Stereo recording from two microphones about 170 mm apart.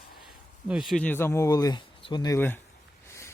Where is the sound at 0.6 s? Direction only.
5° right (ahead or behind); by 2.3 s 25° left (ahead or behind).